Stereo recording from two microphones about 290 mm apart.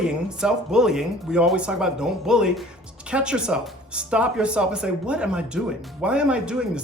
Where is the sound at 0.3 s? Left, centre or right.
Centre.